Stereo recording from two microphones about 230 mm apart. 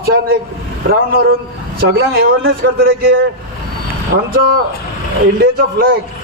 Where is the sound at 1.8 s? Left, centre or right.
Right.